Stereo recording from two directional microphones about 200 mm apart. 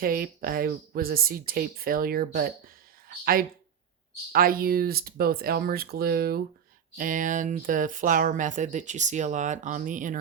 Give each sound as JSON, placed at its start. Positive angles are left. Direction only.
{"t": 0.0, "sound": "speech", "side_deg": -45}
{"t": 4.3, "sound": "speech", "side_deg": -45}